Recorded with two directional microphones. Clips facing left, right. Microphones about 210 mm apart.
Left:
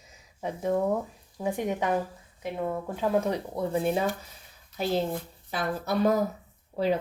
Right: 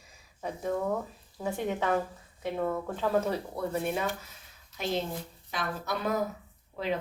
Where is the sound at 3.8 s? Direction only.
30° left (ahead or behind).